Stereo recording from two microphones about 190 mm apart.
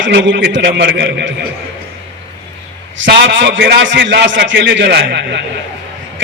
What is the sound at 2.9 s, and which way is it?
A man's voice, 70° right (ahead or behind).